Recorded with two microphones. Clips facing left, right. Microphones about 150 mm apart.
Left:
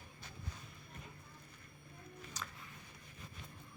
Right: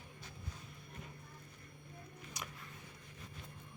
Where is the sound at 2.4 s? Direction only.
15° right (ahead or behind).